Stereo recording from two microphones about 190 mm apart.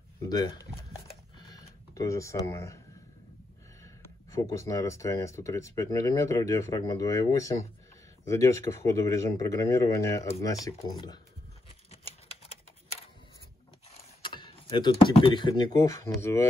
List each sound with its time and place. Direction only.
0.2 s speech: 20° left (ahead or behind)
1.4 s a sound: 20° left (ahead or behind)
3.8 s speech: 15° left (ahead or behind)
14.2 s speech: 25° left (ahead or behind)